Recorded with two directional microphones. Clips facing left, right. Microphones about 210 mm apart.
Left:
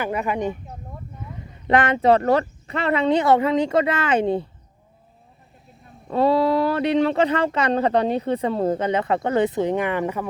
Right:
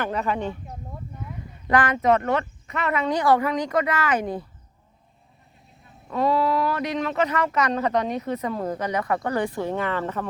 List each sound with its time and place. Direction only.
0.0 s speech: 10° left (ahead or behind)
1.6 s speech: 25° left (ahead or behind)
6.1 s speech: 30° left (ahead or behind); by 10.2 s 15° left (ahead or behind)